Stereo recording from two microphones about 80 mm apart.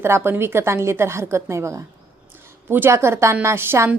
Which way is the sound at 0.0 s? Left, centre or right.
Right.